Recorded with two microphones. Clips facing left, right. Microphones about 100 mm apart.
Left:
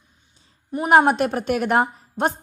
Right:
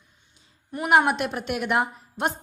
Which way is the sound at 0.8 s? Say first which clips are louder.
Left 5 dB; 40° left (ahead or behind).